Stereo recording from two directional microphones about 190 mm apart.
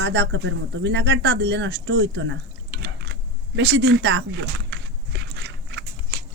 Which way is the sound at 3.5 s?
70° right (ahead or behind).